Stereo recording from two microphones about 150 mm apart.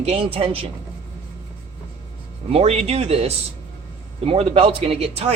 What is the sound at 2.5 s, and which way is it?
Speech, 40° right (ahead or behind).